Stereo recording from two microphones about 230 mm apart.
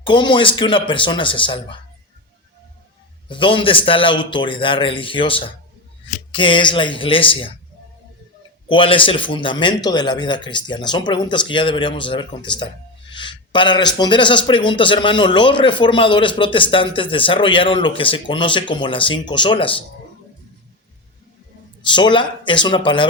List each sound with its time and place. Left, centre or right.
0.0 s a man's voice: left
3.2 s a man's voice: left
8.7 s a man's voice: left
21.8 s a man's voice: left